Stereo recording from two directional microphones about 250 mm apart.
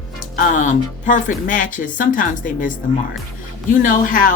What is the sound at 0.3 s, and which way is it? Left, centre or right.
Speech, left.